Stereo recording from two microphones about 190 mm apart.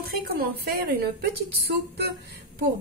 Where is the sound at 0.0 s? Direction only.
55° right (ahead or behind).